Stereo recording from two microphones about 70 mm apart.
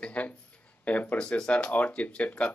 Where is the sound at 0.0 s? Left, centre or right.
Left.